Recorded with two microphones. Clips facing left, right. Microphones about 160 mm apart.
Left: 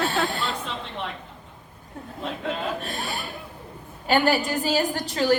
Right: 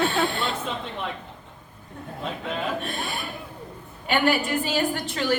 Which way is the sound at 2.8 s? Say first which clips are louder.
Even; 40° left (ahead or behind).